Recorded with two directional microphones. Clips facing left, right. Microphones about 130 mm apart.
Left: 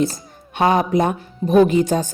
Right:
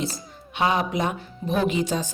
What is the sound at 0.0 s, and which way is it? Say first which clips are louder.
Speech: left 9 dB; 50° left (ahead or behind).